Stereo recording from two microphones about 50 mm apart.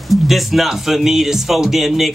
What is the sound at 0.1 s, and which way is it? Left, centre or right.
Speech, centre.